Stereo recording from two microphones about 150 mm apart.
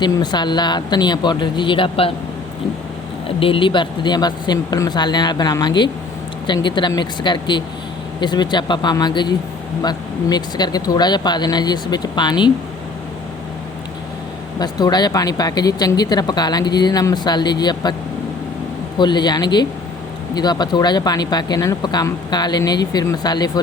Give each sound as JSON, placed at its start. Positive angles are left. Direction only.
{"t": 0.0, "sound": "speech", "side_deg": 30}
{"t": 3.2, "sound": "speech", "side_deg": 35}
{"t": 14.6, "sound": "speech", "side_deg": 25}
{"t": 18.9, "sound": "speech", "side_deg": 30}